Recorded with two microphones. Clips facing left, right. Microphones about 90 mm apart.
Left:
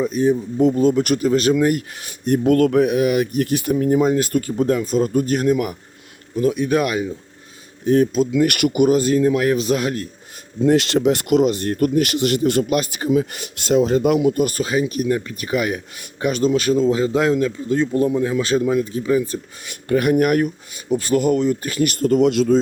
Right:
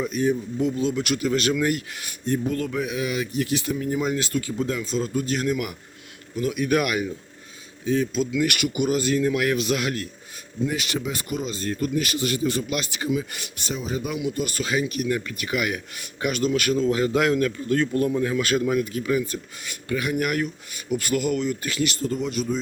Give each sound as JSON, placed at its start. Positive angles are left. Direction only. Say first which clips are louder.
{"t": 0.1, "sound": "speech", "louder": "left 5 dB", "side_deg": 35}
{"t": 0.6, "sound": "speech", "louder": "left 10 dB", "side_deg": 50}
{"t": 2.2, "sound": "speech", "louder": "left 10 dB", "side_deg": 70}
{"t": 8.4, "sound": "speech", "louder": "left 8 dB", "side_deg": 50}
{"t": 10.6, "sound": "speech", "louder": "left 11 dB", "side_deg": 80}
{"t": 13.7, "sound": "speech", "louder": "left 13 dB", "side_deg": 85}
{"t": 14.2, "sound": "a man's voice", "louder": "left 9 dB", "side_deg": 45}
{"t": 20.0, "sound": "speech", "louder": "left 9 dB", "side_deg": 45}
{"t": 20.9, "sound": "speech", "louder": "left 6 dB", "side_deg": 35}